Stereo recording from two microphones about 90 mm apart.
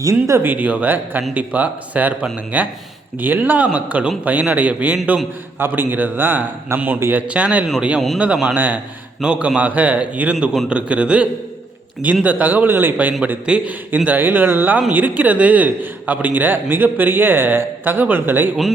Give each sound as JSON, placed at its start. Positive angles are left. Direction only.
{"t": 0.0, "sound": "a man's voice", "side_deg": -35}